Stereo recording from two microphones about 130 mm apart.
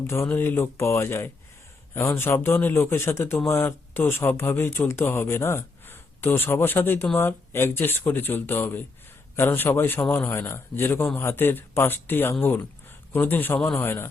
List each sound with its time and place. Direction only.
0.1 s speech: 20° left (ahead or behind)